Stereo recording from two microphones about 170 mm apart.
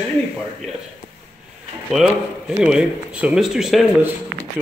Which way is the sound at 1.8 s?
Centre (ahead or behind).